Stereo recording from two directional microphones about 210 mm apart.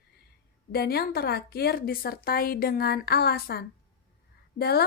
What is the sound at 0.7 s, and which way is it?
A woman's voice, 50° left (ahead or behind).